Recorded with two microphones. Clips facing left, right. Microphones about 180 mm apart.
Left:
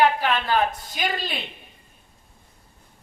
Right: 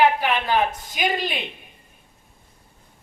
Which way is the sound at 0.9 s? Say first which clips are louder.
Right 4 dB; 15° right (ahead or behind).